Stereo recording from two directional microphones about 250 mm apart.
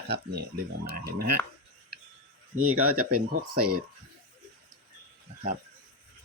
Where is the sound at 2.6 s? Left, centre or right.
Right.